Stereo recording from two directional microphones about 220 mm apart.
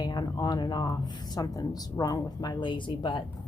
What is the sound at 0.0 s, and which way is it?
Speech, 20° left (ahead or behind).